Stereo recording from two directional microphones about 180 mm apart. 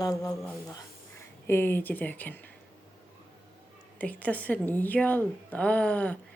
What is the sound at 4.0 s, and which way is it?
A woman's voice, 10° left (ahead or behind).